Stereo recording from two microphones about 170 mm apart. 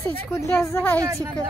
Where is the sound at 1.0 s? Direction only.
15° right (ahead or behind).